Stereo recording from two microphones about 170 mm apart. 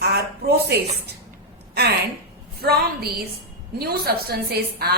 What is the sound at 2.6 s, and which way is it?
A woman's voice, 65° right (ahead or behind).